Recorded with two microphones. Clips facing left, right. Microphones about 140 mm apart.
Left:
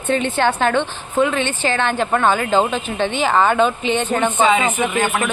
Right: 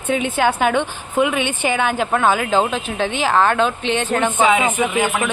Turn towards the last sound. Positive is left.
turn(degrees=-5)  # may be behind; listen again after turning